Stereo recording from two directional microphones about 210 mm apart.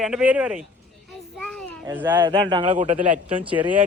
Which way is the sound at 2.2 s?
20° right (ahead or behind).